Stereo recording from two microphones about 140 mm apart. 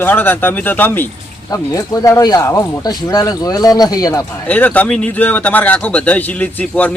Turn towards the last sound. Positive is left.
turn(degrees=10)  # may be behind; listen again after turning